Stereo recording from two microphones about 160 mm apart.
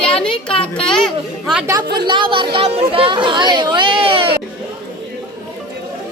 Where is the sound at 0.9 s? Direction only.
5° left (ahead or behind).